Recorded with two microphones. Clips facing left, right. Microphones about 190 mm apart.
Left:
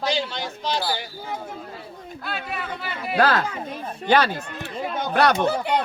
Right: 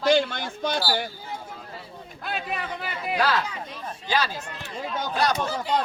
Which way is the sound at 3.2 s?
50° left (ahead or behind).